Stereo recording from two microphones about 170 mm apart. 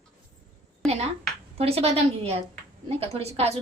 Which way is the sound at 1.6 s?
35° right (ahead or behind).